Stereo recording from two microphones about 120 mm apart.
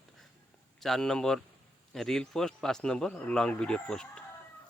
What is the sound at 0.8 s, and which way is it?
Speech, 5° left (ahead or behind).